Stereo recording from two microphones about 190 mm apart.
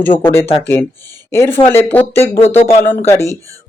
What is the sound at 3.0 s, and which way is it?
Speech, 15° left (ahead or behind).